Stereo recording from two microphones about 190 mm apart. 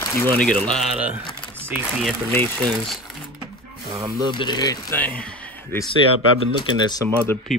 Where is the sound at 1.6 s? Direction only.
10° right (ahead or behind).